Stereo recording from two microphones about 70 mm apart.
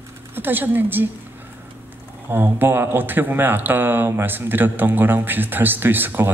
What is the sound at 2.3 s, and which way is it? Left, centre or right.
Speech, right.